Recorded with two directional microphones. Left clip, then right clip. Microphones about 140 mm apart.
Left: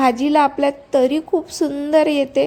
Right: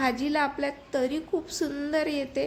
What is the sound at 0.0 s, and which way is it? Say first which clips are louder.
A woman's voice: left 11 dB; 45° left (ahead or behind).